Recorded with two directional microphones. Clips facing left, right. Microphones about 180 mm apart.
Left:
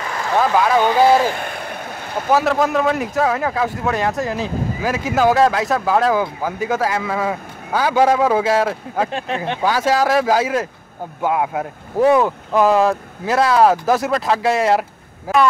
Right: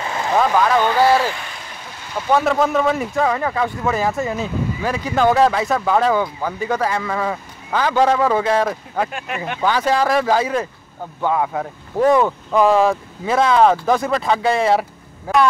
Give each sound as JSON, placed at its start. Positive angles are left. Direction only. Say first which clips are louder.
{"t": 0.4, "sound": "a man's voice", "louder": "left 1 dB", "side_deg": 5}
{"t": 1.3, "sound": "vehicle", "louder": "left 7 dB", "side_deg": 55}
{"t": 2.3, "sound": "a man's voice", "louder": "even", "side_deg": 0}